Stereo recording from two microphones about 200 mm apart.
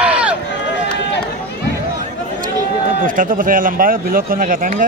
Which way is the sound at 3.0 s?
45° right (ahead or behind).